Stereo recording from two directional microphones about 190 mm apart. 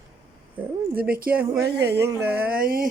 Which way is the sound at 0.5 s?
10° right (ahead or behind).